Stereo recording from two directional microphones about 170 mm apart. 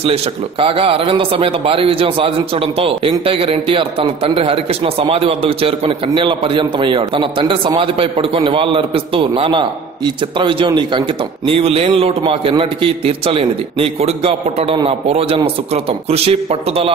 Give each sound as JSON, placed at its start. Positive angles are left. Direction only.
{"t": 0.0, "sound": "a man's voice", "side_deg": -35}